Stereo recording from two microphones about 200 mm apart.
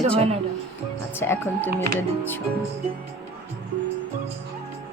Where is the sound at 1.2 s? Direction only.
10° left (ahead or behind).